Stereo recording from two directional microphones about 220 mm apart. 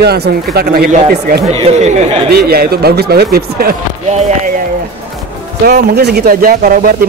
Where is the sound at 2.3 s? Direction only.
45° right (ahead or behind).